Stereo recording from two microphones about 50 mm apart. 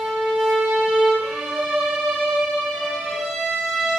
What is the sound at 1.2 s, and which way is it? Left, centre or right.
Violin, centre.